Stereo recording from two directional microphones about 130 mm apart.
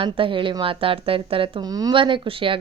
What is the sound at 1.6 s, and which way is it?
Speech, 30° right (ahead or behind).